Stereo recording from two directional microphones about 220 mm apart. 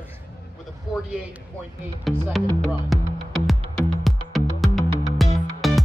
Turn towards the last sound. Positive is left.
turn(degrees=0)  # may be behind; listen again after turning